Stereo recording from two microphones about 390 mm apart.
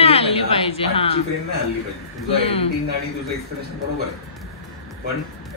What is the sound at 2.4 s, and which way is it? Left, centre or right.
Speech, centre.